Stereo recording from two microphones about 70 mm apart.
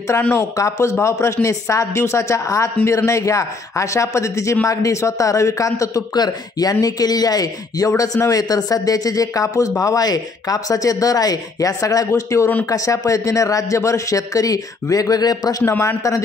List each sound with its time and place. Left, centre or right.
0.3 s a man's voice: left
6.1 s speech: left
7.9 s speech: left
12.1 s a man's voice: left
15.6 s speech: left